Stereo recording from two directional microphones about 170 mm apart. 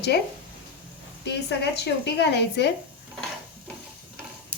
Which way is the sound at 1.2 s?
85° left.